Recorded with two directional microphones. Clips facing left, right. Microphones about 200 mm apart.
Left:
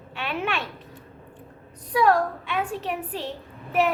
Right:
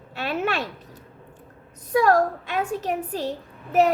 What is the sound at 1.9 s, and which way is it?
A woman's voice, 45° right (ahead or behind).